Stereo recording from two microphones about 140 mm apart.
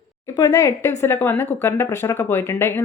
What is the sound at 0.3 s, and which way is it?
Speech, 20° left (ahead or behind).